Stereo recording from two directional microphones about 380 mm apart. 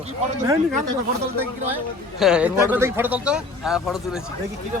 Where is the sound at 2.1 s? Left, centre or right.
Centre.